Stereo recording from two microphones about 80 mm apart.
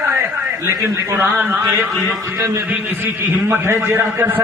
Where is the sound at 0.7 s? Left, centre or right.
Right.